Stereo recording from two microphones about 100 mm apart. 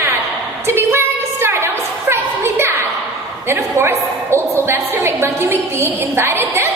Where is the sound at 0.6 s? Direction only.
25° right (ahead or behind).